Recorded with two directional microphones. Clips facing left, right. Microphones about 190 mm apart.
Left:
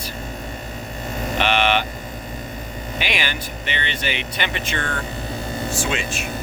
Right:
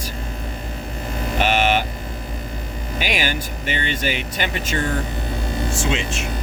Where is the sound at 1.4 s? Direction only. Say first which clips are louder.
Right 1 dB; 45° right (ahead or behind).